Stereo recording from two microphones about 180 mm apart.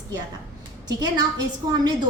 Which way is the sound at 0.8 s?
25° right (ahead or behind).